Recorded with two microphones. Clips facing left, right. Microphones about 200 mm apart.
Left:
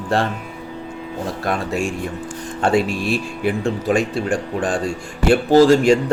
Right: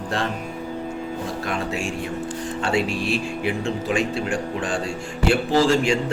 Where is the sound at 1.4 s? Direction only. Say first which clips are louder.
Left 6 dB; 45° left (ahead or behind).